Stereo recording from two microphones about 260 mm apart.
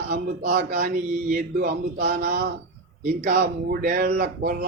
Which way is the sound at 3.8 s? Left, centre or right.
Right.